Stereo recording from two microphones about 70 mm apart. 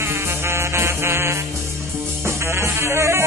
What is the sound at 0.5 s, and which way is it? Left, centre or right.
Music, right.